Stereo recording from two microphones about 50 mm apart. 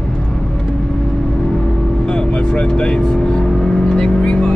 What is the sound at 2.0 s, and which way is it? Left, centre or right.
Vehicle, centre.